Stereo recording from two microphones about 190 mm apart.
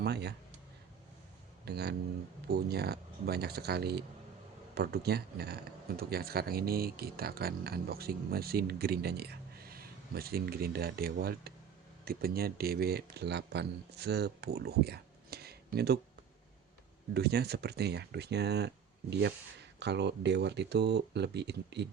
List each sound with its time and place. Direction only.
0.0 s speech: 60° right (ahead or behind)
1.6 s speech: 60° right (ahead or behind)
17.2 s speech: 60° right (ahead or behind)
19.8 s speech: 65° right (ahead or behind)